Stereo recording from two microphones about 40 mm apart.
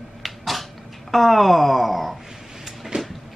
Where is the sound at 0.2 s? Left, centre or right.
Centre.